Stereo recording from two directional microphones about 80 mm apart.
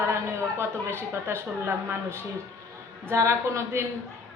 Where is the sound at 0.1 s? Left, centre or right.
Right.